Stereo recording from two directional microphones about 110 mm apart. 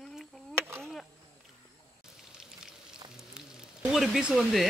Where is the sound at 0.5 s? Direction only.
20° right (ahead or behind).